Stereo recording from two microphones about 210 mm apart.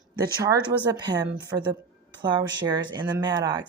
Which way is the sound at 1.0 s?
20° right (ahead or behind).